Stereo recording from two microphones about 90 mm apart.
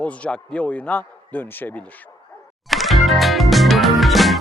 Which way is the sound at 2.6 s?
Centre (ahead or behind).